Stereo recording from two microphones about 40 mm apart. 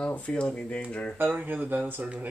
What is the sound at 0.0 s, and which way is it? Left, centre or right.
Speech, left.